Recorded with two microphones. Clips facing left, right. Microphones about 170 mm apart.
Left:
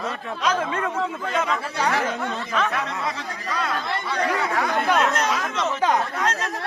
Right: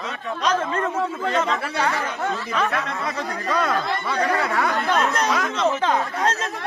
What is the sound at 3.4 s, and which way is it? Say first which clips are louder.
Speech: right 4 dB; 55° right (ahead or behind).